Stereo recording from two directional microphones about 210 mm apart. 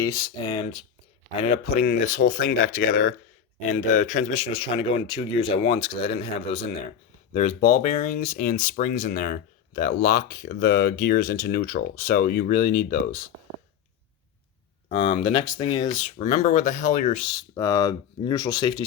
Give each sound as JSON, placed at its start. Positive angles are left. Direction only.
{"t": 0.0, "sound": "speech", "side_deg": 15}
{"t": 1.5, "sound": "speech", "side_deg": 40}
{"t": 15.2, "sound": "speech", "side_deg": 25}
{"t": 15.9, "sound": "speech", "side_deg": 35}
{"t": 17.2, "sound": "speech", "side_deg": 15}